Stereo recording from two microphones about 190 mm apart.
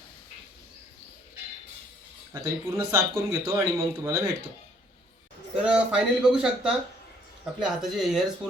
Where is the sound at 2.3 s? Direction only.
15° right (ahead or behind).